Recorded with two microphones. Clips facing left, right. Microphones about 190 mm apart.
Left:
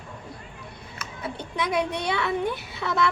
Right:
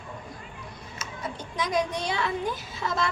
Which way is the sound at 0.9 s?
60° left (ahead or behind).